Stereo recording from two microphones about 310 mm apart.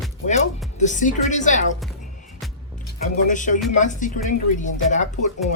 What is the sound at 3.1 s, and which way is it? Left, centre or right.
Speech, left.